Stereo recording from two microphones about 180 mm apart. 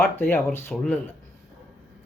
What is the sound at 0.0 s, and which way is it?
Speech, 10° left (ahead or behind).